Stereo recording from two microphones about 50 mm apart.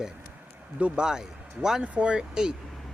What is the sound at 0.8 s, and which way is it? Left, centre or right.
A man's voice, centre.